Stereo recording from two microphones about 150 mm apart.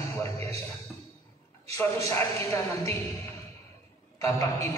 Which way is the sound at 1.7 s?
20° left (ahead or behind).